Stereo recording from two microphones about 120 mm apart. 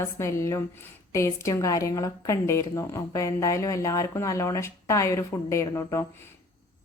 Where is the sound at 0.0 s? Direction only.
25° left (ahead or behind).